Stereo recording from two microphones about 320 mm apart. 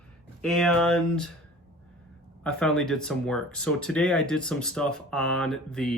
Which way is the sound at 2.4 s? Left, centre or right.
Centre.